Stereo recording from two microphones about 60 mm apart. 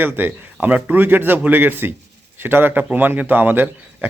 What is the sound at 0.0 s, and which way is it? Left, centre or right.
A man's voice, right.